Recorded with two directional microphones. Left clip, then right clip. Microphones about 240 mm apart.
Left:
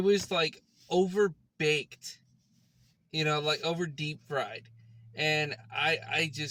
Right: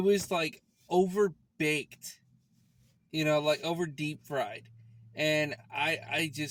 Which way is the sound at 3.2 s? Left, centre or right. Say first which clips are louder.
Right 2 dB; right.